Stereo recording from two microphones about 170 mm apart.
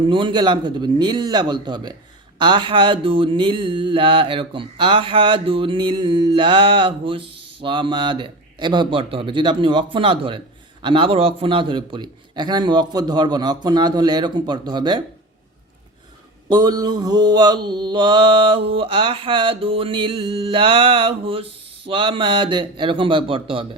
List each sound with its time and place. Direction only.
0.0 s a man's voice: 30° right (ahead or behind)
2.4 s mantra: 30° right (ahead or behind)
7.6 s a man's voice: 30° right (ahead or behind)
16.5 s mantra: 20° right (ahead or behind)